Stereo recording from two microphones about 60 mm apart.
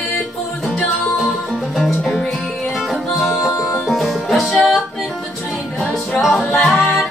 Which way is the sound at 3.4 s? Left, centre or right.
Centre.